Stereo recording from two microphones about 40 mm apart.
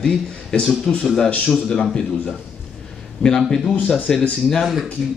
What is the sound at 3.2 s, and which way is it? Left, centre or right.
Speech, centre.